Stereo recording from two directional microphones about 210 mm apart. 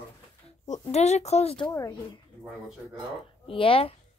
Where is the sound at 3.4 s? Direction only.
25° left (ahead or behind).